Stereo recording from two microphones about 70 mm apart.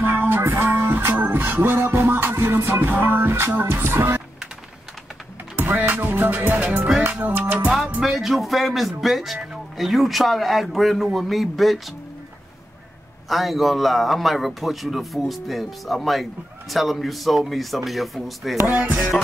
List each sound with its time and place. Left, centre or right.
0.0 s music: right
5.6 s music: right
8.0 s a man's voice: centre
13.3 s a man's voice: centre
18.6 s music: right
18.9 s a man's voice: centre